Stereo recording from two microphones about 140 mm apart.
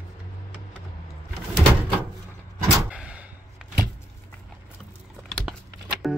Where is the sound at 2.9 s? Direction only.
10° right (ahead or behind).